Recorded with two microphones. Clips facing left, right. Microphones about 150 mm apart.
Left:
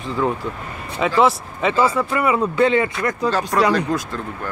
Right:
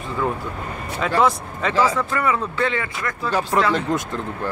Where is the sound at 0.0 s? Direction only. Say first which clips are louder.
Left 3 dB; centre (ahead or behind); by 3.3 s 20° left (ahead or behind).